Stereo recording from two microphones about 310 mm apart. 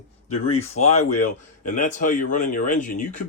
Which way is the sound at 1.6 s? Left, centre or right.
Left.